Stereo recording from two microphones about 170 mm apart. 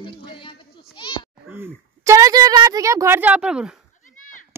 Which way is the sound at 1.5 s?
15° right (ahead or behind).